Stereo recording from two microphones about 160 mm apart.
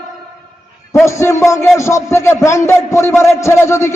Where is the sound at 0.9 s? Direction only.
20° left (ahead or behind).